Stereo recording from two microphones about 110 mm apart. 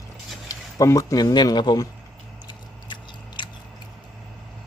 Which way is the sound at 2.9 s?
45° left (ahead or behind).